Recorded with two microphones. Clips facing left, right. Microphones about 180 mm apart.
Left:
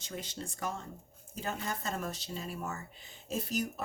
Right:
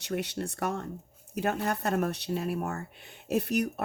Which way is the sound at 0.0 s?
70° right (ahead or behind).